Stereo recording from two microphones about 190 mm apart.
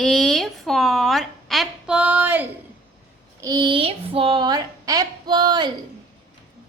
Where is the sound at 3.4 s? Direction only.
20° right (ahead or behind).